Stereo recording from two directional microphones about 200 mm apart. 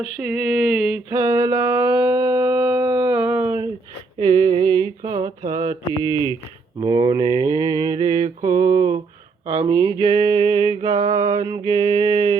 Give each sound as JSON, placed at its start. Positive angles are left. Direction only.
{"t": 0.2, "sound": "mantra", "side_deg": -5}
{"t": 0.9, "sound": "a sound", "side_deg": -10}
{"t": 6.1, "sound": "speech", "side_deg": 15}
{"t": 6.7, "sound": "mantra", "side_deg": -20}